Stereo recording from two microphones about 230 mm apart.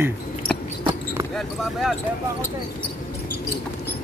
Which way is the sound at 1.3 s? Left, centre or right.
Centre.